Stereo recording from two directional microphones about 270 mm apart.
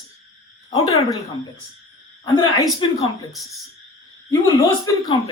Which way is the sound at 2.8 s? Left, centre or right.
Centre.